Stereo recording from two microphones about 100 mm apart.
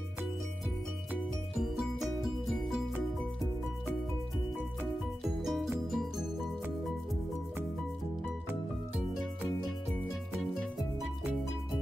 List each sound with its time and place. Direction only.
1.6 s music: 5° right (ahead or behind)
5.4 s music: centre (ahead or behind)